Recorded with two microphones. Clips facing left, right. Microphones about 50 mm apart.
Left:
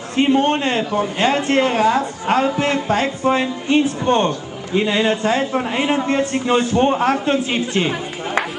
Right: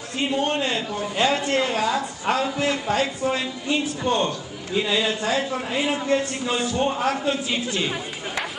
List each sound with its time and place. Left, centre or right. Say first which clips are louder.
0.2 s a man's voice: left 8 dB; left